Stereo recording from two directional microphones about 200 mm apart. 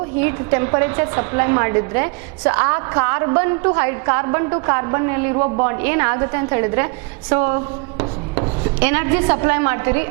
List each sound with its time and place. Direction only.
0.2 s a woman's voice: 15° right (ahead or behind)